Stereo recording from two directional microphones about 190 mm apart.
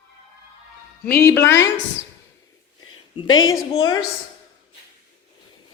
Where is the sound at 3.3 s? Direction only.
90° left.